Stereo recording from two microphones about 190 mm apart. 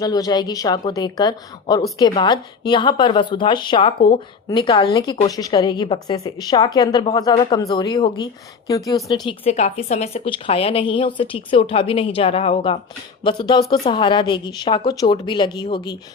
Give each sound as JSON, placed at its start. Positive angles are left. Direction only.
{"t": 0.0, "sound": "speech", "side_deg": 20}